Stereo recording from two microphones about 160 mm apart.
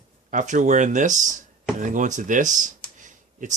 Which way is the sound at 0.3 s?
50° right (ahead or behind).